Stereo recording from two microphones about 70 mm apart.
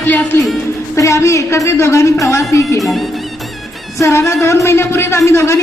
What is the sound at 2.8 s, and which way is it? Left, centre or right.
Speech, centre.